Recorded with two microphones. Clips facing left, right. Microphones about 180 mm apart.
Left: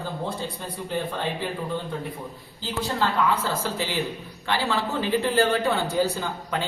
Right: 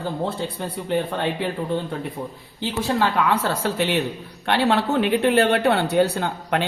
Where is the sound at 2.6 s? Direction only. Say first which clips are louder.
Right 5 dB; 70° right (ahead or behind).